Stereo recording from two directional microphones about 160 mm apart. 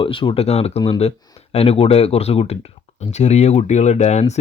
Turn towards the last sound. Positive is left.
turn(degrees=45)  # may be behind; listen again after turning